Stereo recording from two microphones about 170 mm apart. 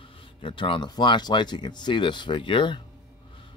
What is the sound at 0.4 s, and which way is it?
Speech, 30° left (ahead or behind).